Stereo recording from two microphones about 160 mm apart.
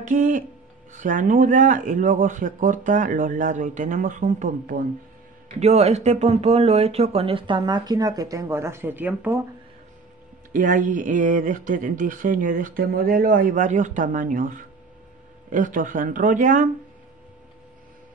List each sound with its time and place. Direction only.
0.0 s speech: 55° right (ahead or behind)
5.6 s speech: 45° right (ahead or behind); by 9.4 s 10° right (ahead or behind)
10.5 s speech: 55° right (ahead or behind)